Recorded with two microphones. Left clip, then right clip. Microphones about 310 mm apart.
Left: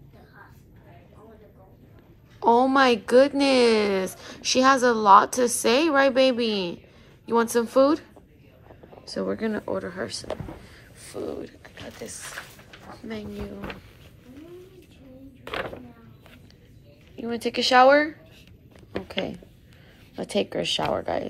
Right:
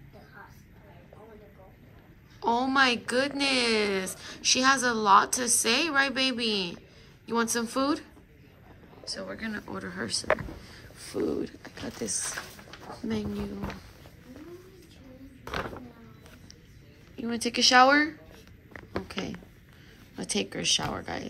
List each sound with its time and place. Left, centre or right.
2.4 s a woman's voice: centre
9.1 s a woman's voice: centre
10.6 s a sound: centre
12.9 s speech: centre
17.1 s a woman's voice: centre
18.9 s a sound: centre
20.2 s a woman's voice: centre